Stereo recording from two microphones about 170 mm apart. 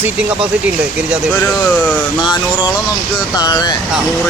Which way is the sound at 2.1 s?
25° left (ahead or behind).